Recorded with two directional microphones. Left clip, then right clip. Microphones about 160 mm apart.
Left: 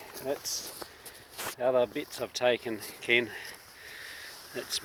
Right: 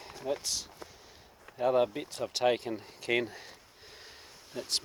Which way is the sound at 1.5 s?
40° right (ahead or behind).